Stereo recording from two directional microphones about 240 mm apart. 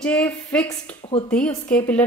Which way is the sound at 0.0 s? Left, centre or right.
Centre.